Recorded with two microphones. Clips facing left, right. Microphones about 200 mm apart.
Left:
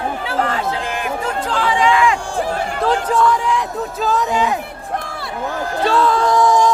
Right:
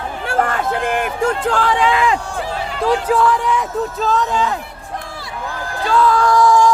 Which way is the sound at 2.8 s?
5° right (ahead or behind).